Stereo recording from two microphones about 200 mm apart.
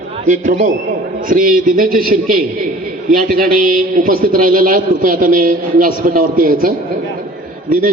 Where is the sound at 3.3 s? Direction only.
45° right (ahead or behind).